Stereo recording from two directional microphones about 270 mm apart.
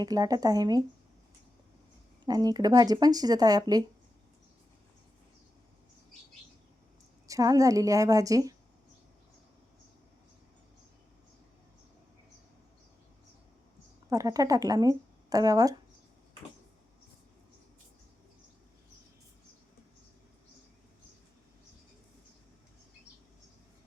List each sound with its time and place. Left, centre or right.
0.0 s speech: centre
2.2 s speech: centre
7.3 s speech: centre
14.1 s speech: centre